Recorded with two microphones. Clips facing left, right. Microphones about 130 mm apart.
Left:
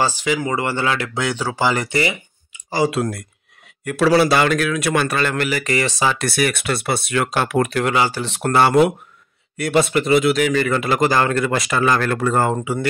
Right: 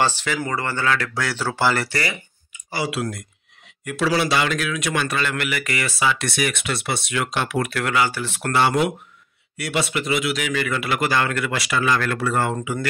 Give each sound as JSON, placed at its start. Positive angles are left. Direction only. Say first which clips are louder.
{"t": 0.0, "sound": "speech", "louder": "left 3 dB", "side_deg": 10}
{"t": 2.7, "sound": "a man's voice", "louder": "left 6 dB", "side_deg": 45}
{"t": 6.2, "sound": "a man's voice", "louder": "left 4 dB", "side_deg": 55}
{"t": 7.6, "sound": "speech", "louder": "left 3 dB", "side_deg": 25}
{"t": 8.5, "sound": "a man's voice", "louder": "left 5 dB", "side_deg": 55}